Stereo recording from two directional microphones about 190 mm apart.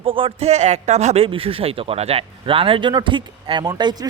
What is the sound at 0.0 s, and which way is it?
A woman's voice, 30° right (ahead or behind).